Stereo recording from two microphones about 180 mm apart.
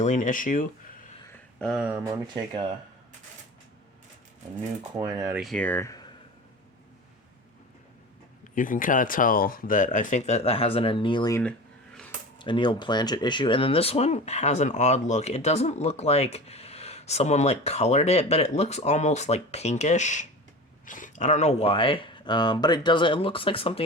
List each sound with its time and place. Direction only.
0.0 s speech: 45° left (ahead or behind)
1.5 s speech: centre (ahead or behind)
4.8 s speech: 20° right (ahead or behind)
5.4 s speech: 5° left (ahead or behind)
8.5 s speech: 50° left (ahead or behind); by 23.8 s 30° left (ahead or behind)